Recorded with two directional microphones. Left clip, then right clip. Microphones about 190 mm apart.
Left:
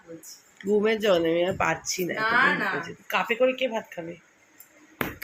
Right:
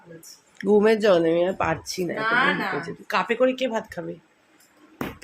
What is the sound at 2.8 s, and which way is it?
Speech, 15° right (ahead or behind).